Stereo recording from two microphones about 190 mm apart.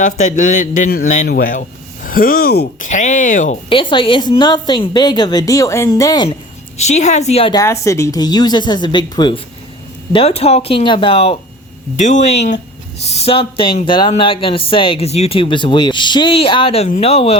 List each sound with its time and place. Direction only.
0.0 s speech: 40° left (ahead or behind)
2.8 s speech: 40° left (ahead or behind)
3.7 s speech: 25° left (ahead or behind)
6.7 s speech: 35° left (ahead or behind)
7.5 s speech: 15° left (ahead or behind); by 17.3 s 30° left (ahead or behind)